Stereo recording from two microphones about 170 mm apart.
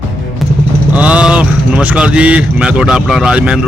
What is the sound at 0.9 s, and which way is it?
Speech, 10° right (ahead or behind).